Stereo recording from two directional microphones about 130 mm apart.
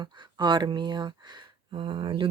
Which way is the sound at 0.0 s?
35° right (ahead or behind).